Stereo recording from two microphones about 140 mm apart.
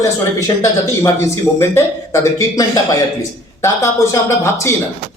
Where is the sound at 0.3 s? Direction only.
25° left (ahead or behind).